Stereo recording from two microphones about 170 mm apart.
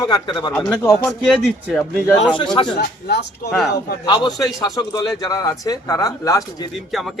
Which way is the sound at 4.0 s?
25° left (ahead or behind).